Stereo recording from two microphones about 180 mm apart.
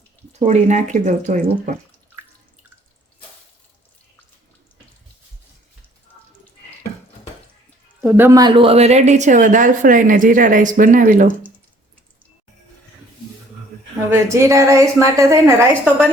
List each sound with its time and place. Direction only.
0.3 s speech: 40° right (ahead or behind)
8.0 s speech: 10° right (ahead or behind); by 11.3 s 50° right (ahead or behind)
14.1 s a woman's voice: 15° right (ahead or behind)